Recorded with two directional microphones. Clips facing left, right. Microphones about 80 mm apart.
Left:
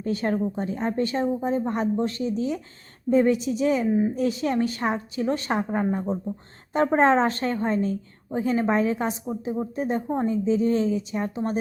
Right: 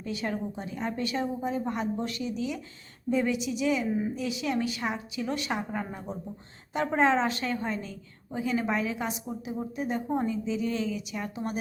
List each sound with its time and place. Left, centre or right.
0.0 s a woman's voice: left
3.8 s speech: centre
4.1 s a woman's voice: left